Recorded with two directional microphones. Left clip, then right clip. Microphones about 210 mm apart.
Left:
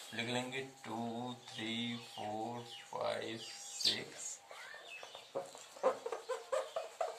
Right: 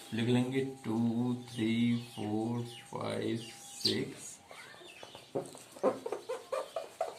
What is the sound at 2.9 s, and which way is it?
Mantra, 5° left (ahead or behind).